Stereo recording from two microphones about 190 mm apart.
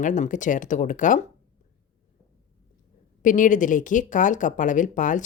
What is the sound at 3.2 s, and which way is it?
Speech, 45° left (ahead or behind).